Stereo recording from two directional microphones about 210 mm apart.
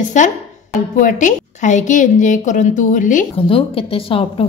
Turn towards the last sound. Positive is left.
turn(degrees=25)  # may be behind; listen again after turning